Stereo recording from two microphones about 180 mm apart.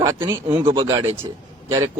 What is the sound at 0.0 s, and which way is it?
A man's voice, 15° right (ahead or behind).